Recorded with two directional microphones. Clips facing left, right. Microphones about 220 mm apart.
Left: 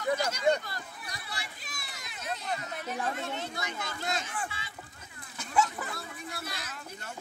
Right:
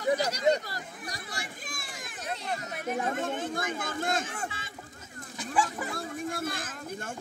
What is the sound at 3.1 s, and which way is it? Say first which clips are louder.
Speech: right 4 dB; 50° right (ahead or behind).